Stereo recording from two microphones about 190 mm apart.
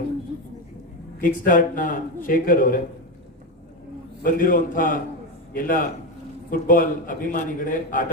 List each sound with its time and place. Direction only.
1.2 s a man's voice: 45° left (ahead or behind)
4.2 s a man's voice: 45° left (ahead or behind)